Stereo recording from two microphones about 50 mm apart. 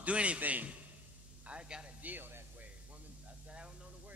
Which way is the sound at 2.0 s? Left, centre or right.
Right.